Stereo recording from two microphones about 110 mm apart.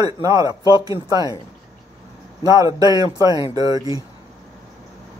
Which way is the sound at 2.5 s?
35° right (ahead or behind).